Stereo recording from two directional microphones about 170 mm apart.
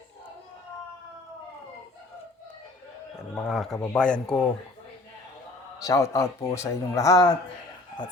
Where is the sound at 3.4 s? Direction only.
Centre (ahead or behind).